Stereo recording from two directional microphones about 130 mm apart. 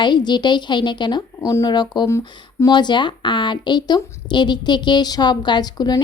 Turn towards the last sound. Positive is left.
turn(degrees=30)  # may be behind; listen again after turning